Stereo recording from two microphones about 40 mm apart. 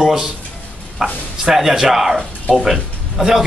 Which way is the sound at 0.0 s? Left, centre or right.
Centre.